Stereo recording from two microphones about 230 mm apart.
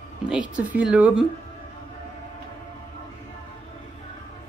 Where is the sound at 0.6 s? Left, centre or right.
Centre.